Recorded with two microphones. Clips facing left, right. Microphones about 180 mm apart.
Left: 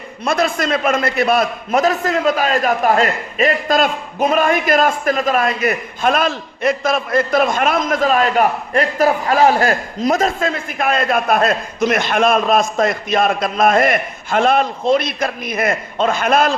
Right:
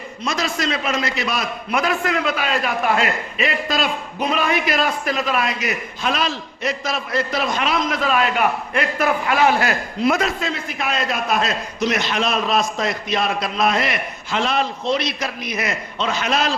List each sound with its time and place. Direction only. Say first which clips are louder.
0.3 s a man's voice: left 6 dB; 55° left (ahead or behind)